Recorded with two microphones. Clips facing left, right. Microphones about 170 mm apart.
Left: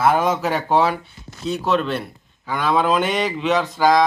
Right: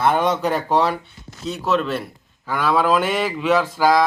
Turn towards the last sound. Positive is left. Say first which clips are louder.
# even
turn(degrees=-10)  # may be behind; listen again after turning